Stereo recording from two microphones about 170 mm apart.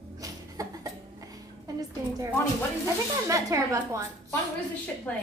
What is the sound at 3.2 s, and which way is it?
Speech, 20° right (ahead or behind).